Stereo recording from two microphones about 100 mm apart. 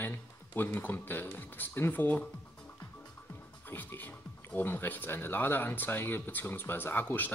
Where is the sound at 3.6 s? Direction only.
20° left (ahead or behind).